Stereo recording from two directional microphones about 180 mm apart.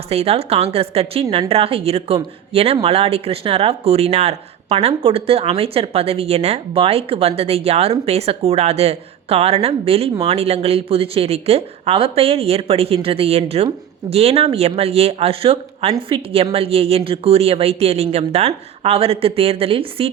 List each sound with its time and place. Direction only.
0.1 s speech: 35° right (ahead or behind)